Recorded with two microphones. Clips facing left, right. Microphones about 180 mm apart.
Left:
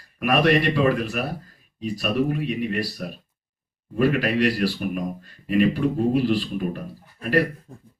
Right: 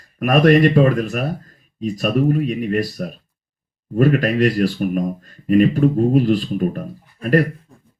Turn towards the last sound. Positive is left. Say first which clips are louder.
# left 4 dB
turn(degrees=45)  # may be behind; listen again after turning